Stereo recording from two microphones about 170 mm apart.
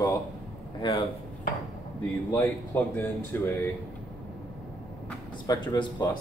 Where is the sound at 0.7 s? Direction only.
30° left (ahead or behind).